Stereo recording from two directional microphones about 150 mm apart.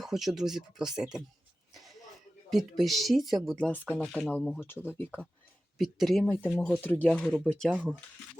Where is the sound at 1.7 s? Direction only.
Centre (ahead or behind).